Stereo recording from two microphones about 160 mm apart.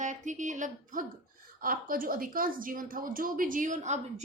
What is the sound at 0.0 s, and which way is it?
A woman's voice, 50° right (ahead or behind).